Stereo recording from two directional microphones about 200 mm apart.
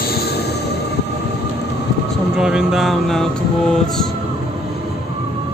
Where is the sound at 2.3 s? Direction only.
5° right (ahead or behind).